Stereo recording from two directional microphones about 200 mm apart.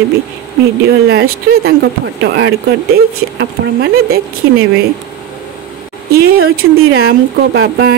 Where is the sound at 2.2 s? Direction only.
60° right (ahead or behind).